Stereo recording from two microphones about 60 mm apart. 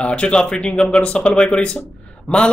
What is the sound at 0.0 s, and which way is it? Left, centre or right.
Speech, centre.